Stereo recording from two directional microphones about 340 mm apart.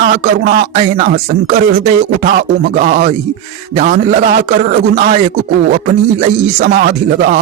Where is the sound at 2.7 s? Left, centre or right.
Right.